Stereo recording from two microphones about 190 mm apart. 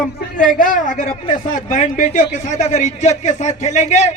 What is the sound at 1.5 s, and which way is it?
A man's voice, 45° left (ahead or behind).